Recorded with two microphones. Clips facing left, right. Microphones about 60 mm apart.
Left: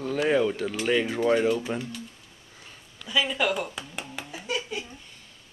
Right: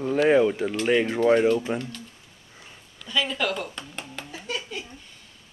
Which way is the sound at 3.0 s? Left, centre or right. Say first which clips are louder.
Left 1 dB; centre.